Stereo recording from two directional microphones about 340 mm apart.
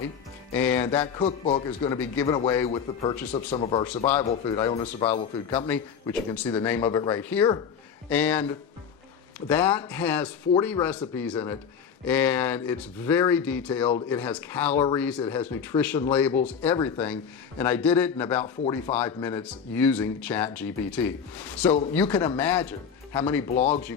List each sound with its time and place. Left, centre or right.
0.5 s speech: centre
1.2 s a man's voice: centre
5.5 s speech: centre
18.4 s a man's voice: centre
18.9 s speech: centre